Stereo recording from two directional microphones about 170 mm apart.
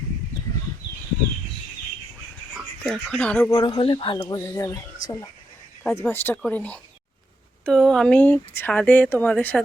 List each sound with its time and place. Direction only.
2.8 s speech: 5° left (ahead or behind)
3.5 s speech: 30° left (ahead or behind); by 9.6 s 10° left (ahead or behind)